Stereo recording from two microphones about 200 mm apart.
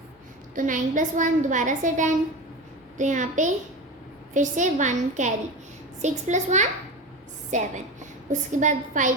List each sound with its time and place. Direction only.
0.5 s a woman's voice: 40° right (ahead or behind)